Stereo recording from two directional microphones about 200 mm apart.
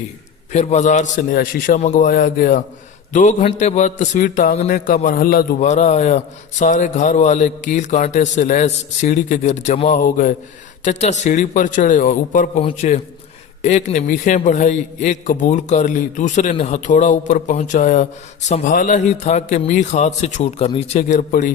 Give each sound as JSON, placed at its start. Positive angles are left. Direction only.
{"t": 0.5, "sound": "a man's voice", "side_deg": 35}